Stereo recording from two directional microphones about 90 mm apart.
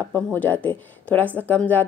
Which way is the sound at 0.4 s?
20° left (ahead or behind).